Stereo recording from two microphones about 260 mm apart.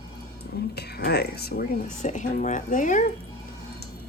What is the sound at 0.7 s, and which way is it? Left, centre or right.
Speech, left.